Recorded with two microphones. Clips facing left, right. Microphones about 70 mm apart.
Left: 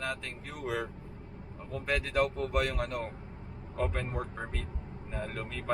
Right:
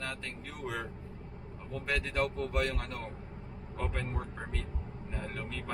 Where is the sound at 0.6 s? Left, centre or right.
Centre.